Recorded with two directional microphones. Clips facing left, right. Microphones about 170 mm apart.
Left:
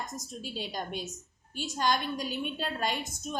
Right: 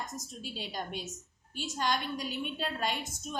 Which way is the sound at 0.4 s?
40° left (ahead or behind).